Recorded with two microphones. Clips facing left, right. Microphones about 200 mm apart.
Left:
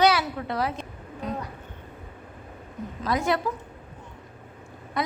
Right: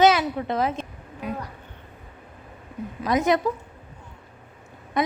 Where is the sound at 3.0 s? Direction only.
20° right (ahead or behind).